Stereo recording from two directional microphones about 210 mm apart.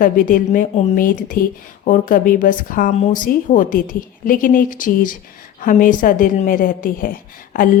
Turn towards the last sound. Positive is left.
turn(degrees=40)  # may be behind; listen again after turning